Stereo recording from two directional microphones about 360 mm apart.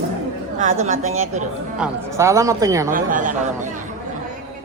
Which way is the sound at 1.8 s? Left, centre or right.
Centre.